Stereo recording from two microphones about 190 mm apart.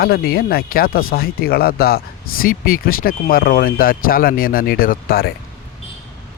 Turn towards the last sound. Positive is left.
turn(degrees=50)  # may be behind; listen again after turning